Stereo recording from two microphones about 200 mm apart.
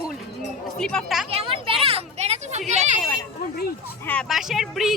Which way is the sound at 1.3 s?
30° right (ahead or behind).